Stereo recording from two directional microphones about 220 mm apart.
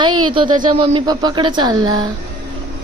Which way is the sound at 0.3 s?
20° right (ahead or behind).